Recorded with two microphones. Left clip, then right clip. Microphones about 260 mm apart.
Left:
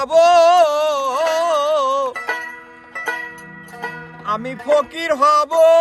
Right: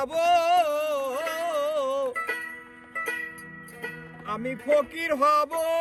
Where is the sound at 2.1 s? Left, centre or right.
Centre.